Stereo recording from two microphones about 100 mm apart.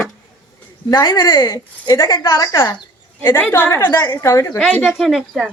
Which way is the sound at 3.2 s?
20° left (ahead or behind).